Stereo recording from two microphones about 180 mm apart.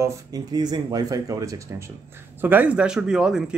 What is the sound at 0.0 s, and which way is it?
Speech, 20° right (ahead or behind).